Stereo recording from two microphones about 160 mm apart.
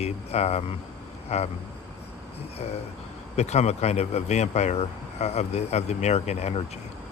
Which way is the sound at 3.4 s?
40° left (ahead or behind).